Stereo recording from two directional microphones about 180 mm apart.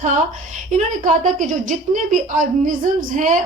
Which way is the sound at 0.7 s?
45° right (ahead or behind).